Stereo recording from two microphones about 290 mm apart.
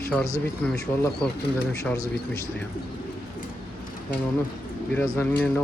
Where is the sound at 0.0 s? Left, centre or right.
Centre.